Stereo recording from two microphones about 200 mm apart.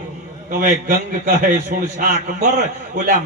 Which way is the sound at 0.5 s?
40° right (ahead or behind).